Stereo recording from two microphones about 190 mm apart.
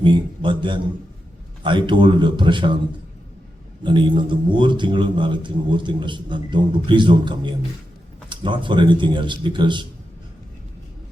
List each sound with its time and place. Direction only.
0.0 s a man's voice: 25° right (ahead or behind)
3.8 s a man's voice: 25° right (ahead or behind)